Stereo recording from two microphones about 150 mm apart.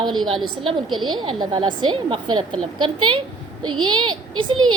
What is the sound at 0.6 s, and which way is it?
A woman's voice, 30° right (ahead or behind).